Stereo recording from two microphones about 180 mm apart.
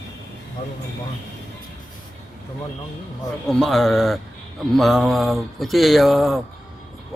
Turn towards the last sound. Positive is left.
turn(degrees=0)  # may be behind; listen again after turning